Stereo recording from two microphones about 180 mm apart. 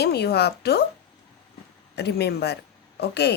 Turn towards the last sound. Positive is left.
turn(degrees=65)  # may be behind; listen again after turning